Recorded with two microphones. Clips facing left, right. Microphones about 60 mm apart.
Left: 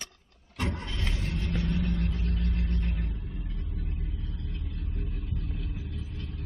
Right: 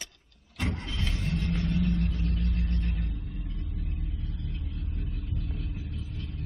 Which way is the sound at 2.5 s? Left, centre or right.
Centre.